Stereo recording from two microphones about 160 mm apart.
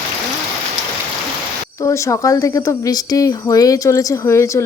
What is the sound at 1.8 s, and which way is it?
Speech, 20° left (ahead or behind).